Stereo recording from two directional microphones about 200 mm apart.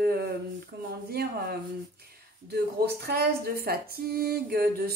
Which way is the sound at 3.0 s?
50° right (ahead or behind).